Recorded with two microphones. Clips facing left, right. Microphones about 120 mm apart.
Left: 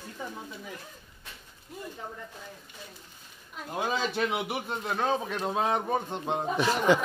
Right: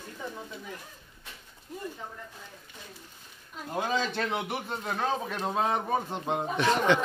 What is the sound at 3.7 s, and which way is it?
Speech, 5° left (ahead or behind).